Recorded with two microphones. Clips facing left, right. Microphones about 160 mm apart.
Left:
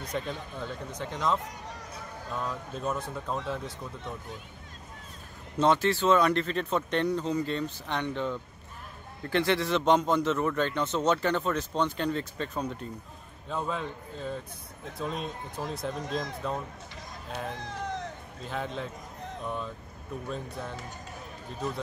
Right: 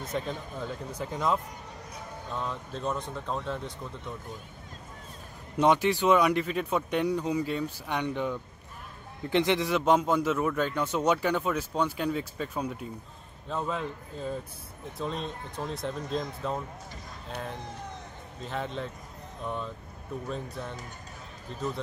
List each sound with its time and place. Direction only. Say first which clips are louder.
0.0 s speech: right 1 dB; 5° right (ahead or behind)
2.3 s speech: even; 5° left (ahead or behind)
5.6 s a man's voice: right 1 dB; 15° right (ahead or behind)
17.6 s cat: left 5 dB; 90° left
18.4 s speech: right 1 dB; centre (ahead or behind)